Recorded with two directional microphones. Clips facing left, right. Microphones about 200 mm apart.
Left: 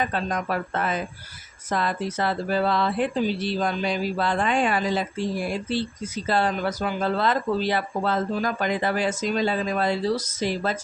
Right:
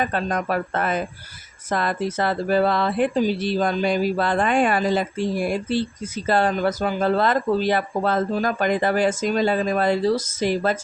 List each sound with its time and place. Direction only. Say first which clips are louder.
0.0 s speech: right 3 dB; 50° right (ahead or behind)